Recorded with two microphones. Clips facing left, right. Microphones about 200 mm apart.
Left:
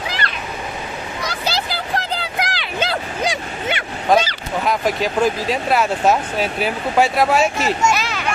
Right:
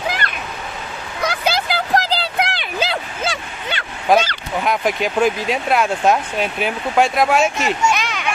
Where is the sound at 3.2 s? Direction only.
20° left (ahead or behind).